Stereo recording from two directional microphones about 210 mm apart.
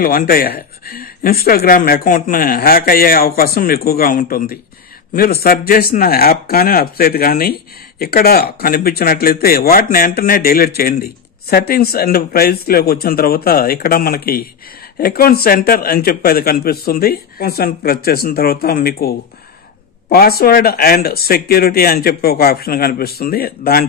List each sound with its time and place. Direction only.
0.0 s speech: 45° left (ahead or behind)